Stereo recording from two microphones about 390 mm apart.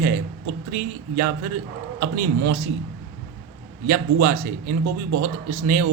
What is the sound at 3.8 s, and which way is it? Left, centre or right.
Speech, right.